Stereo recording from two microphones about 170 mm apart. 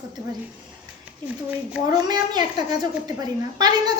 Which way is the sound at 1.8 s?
25° right (ahead or behind).